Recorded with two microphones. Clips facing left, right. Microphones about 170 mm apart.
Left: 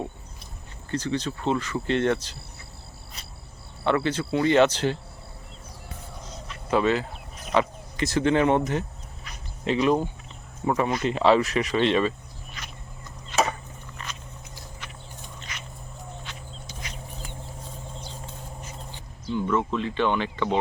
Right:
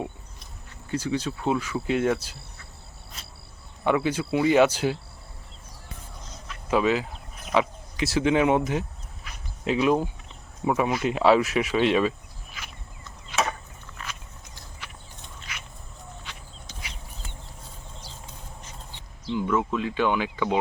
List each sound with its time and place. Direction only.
0.9 s speech: 10° right (ahead or behind)
3.8 s speech: 10° right (ahead or behind)
6.5 s a sound: 5° right (ahead or behind)
7.5 s speech: 5° right (ahead or behind)
9.2 s dog: 5° right (ahead or behind)
10.7 s speech: 5° right (ahead or behind)
12.6 s a sound: 5° right (ahead or behind)
14.0 s a sound: 5° right (ahead or behind)
15.4 s dog: 5° right (ahead or behind)
19.3 s speech: 5° right (ahead or behind)